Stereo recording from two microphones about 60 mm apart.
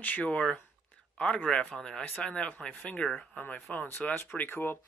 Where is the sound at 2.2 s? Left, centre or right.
Left.